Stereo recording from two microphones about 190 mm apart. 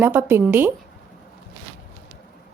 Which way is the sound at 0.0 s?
10° right (ahead or behind).